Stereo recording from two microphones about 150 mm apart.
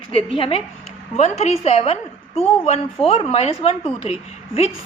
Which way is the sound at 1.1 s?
50° left (ahead or behind).